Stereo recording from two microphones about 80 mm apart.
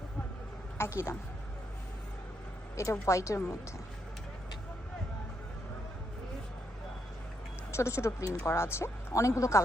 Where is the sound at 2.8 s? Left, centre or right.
Left.